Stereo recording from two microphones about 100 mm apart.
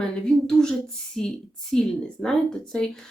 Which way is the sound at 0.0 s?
5° left (ahead or behind).